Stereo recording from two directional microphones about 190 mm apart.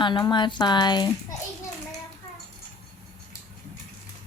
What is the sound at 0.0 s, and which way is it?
Speech, 25° left (ahead or behind).